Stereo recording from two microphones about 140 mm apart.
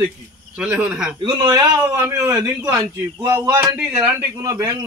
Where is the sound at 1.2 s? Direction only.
30° right (ahead or behind).